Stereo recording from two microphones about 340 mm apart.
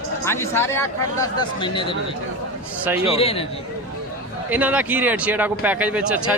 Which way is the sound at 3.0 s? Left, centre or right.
Centre.